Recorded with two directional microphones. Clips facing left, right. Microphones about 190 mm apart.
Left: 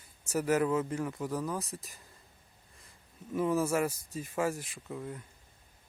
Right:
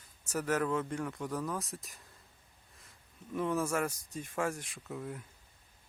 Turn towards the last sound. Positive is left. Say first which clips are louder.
# left 1 dB
turn(degrees=0)  # may be behind; listen again after turning